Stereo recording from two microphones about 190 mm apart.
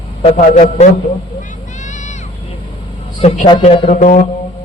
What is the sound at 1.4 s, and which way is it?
Vehicle, 40° left (ahead or behind).